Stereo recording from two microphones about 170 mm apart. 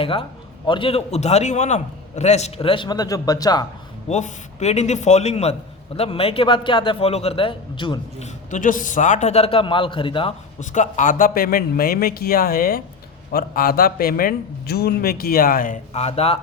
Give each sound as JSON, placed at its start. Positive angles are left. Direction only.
{"t": 0.0, "sound": "a man's voice", "side_deg": 30}
{"t": 4.1, "sound": "a man's voice", "side_deg": 40}
{"t": 8.2, "sound": "a man's voice", "side_deg": 45}
{"t": 10.6, "sound": "a man's voice", "side_deg": 45}